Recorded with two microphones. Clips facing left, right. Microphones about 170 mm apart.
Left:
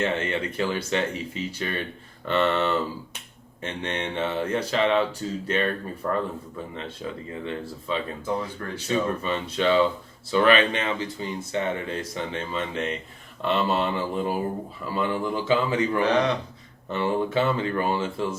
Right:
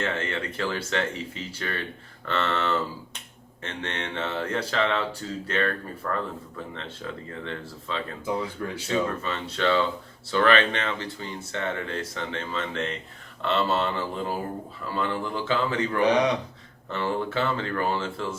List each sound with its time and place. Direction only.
0.0 s speech: 20° left (ahead or behind)
7.3 s speech: 15° left (ahead or behind)
8.2 s speech: 10° right (ahead or behind)
8.9 s speech: 15° left (ahead or behind)